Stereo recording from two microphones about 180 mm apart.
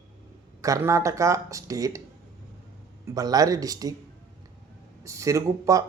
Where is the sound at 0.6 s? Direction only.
15° right (ahead or behind).